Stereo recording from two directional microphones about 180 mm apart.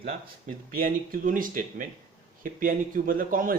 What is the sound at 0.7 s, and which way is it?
Speech, 50° right (ahead or behind).